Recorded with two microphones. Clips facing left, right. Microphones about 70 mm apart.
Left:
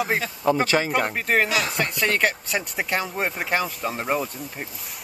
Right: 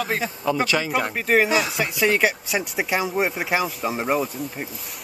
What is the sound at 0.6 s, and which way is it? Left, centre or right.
Speech, left.